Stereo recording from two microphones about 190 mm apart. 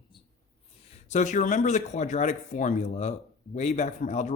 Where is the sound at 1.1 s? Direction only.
40° left (ahead or behind).